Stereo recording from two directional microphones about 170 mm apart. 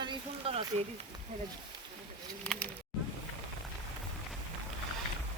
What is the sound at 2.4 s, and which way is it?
Bird, 5° left (ahead or behind).